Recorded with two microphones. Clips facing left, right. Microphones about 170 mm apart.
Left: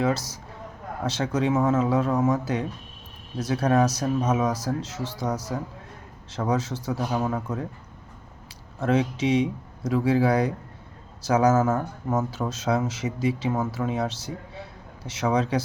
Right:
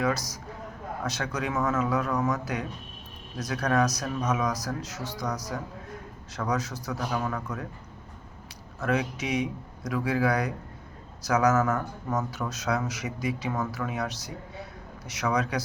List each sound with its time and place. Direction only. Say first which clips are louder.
0.0 s speech: left 3 dB; 25° left (ahead or behind)
8.8 s speech: left 5 dB; 25° left (ahead or behind)